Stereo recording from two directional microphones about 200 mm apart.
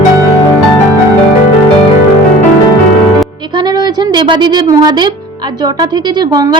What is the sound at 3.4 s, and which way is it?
A woman's voice, 20° right (ahead or behind).